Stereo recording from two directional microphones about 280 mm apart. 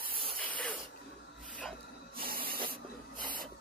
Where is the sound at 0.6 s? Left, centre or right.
Centre.